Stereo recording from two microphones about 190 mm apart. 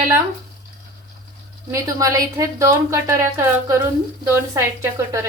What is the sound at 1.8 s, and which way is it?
Speech, 15° right (ahead or behind).